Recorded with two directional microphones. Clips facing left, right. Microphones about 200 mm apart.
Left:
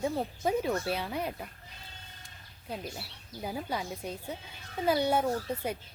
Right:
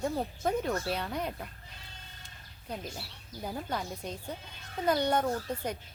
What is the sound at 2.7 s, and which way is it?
A woman's voice, 5° left (ahead or behind).